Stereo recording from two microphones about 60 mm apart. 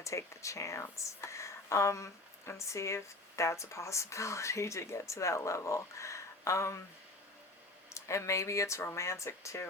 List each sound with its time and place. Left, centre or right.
0.0 s speech: left
7.9 s speech: left